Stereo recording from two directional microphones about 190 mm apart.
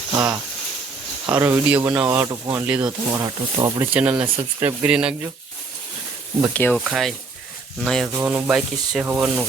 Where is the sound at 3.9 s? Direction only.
5° right (ahead or behind).